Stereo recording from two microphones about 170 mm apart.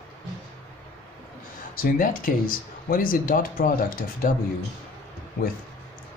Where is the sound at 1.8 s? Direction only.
55° left (ahead or behind).